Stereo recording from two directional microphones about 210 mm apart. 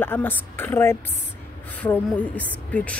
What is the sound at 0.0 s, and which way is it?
Speech, 10° left (ahead or behind).